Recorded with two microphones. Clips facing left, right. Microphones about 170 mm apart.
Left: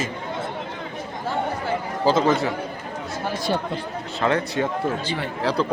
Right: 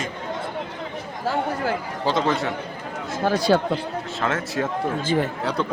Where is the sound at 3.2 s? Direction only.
90° right.